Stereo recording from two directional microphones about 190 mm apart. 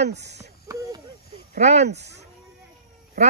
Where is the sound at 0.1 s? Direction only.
65° right (ahead or behind).